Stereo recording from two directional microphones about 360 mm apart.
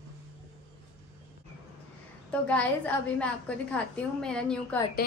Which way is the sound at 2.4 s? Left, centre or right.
Centre.